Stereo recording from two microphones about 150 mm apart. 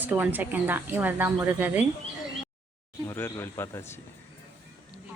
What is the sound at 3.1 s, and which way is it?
Speech, 20° left (ahead or behind).